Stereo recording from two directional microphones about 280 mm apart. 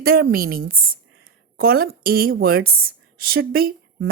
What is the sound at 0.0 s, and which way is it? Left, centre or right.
Speech, right.